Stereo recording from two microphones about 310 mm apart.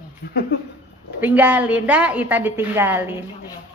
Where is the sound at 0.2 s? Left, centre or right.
Left.